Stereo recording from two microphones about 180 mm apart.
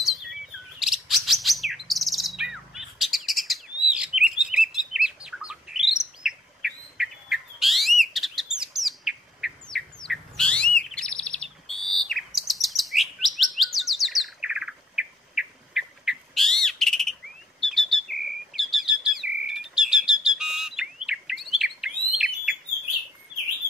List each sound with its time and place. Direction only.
0.7 s chirp: centre (ahead or behind)
6.2 s bird: centre (ahead or behind)
8.0 s chirp: centre (ahead or behind)
10.0 s bird: 5° left (ahead or behind)
10.8 s chirp: 5° left (ahead or behind)